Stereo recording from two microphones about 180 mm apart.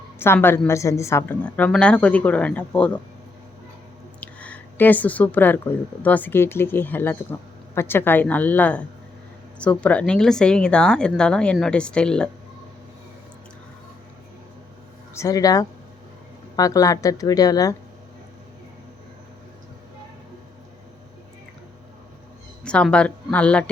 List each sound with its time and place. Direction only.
0.2 s a woman's voice: 10° left (ahead or behind)
4.2 s a sound: 10° left (ahead or behind)
6.0 s a woman's voice: 10° left (ahead or behind)
15.1 s speech: 15° left (ahead or behind)
22.6 s a woman's voice: 5° left (ahead or behind)